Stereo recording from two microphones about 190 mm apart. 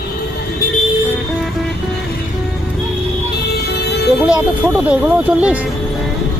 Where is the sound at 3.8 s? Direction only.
60° left (ahead or behind).